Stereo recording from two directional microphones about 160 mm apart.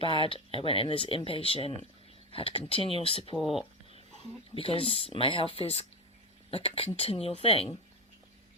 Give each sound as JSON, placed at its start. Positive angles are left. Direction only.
{"t": 0.2, "sound": "speech", "side_deg": 35}
{"t": 4.5, "sound": "speech", "side_deg": 35}